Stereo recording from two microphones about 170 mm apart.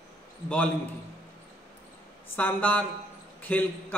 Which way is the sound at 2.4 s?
10° left (ahead or behind).